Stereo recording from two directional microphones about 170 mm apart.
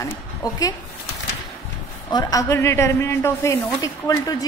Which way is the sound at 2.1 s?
20° left (ahead or behind).